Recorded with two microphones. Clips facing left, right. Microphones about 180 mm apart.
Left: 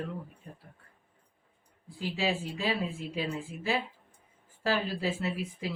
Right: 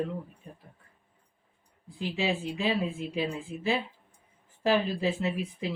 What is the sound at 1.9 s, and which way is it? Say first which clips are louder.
Speech: right 1 dB; 20° right (ahead or behind).